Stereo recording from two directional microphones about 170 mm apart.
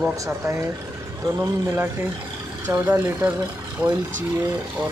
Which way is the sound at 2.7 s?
15° right (ahead or behind).